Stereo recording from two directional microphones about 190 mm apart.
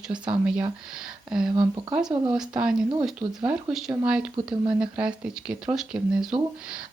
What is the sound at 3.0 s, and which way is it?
Speech, 5° right (ahead or behind).